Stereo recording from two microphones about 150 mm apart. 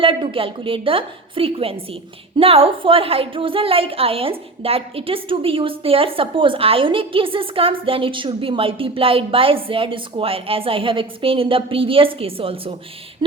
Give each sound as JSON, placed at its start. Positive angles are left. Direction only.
{"t": 0.0, "sound": "a woman's voice", "side_deg": -35}